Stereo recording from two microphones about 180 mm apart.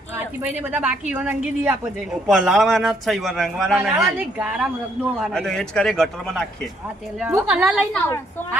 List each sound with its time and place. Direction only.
0.6 s a woman's voice: 10° right (ahead or behind)
7.3 s a man's voice: 10° right (ahead or behind)
7.9 s a woman's voice: 10° left (ahead or behind)